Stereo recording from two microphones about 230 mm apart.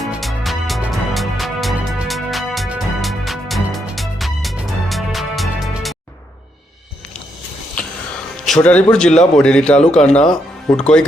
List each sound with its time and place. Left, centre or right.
0.0 s music: centre
8.4 s speech: centre
9.9 s speech: left
10.7 s speech: centre